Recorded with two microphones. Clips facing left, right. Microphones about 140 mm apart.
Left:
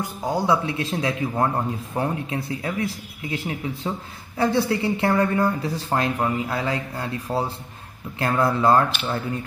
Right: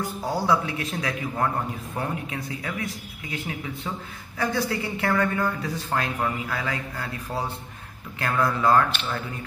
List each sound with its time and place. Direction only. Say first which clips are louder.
0.0 s speech: left 2 dB; 20° left (ahead or behind)